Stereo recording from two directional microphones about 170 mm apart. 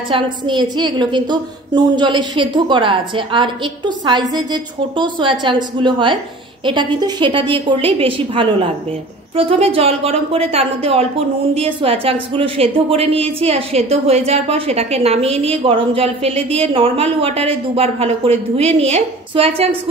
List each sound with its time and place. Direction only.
0.1 s a woman's voice: 25° right (ahead or behind)